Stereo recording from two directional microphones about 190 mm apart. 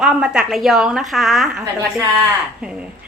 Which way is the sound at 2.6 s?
5° right (ahead or behind).